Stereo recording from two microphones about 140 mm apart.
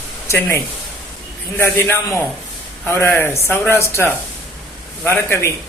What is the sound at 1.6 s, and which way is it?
A man's voice, 15° left (ahead or behind).